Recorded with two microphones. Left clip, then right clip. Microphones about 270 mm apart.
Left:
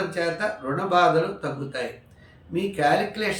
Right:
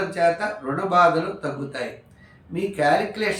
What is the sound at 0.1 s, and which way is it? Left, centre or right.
Speech, centre.